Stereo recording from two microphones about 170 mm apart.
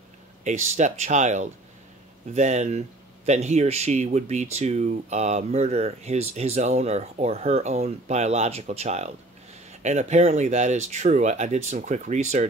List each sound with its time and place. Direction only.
0.4 s speech: 45° right (ahead or behind)